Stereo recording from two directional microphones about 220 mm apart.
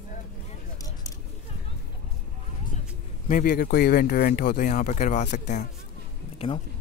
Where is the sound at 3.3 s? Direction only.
40° left (ahead or behind).